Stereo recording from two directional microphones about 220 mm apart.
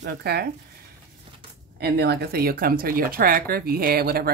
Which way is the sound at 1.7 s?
45° right (ahead or behind).